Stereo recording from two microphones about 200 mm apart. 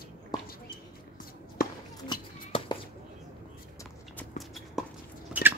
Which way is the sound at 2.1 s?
20° left (ahead or behind).